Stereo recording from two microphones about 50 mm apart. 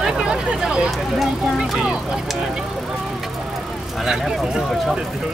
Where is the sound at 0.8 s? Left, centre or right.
Centre.